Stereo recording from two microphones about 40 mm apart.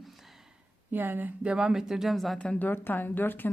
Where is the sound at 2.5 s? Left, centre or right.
Left.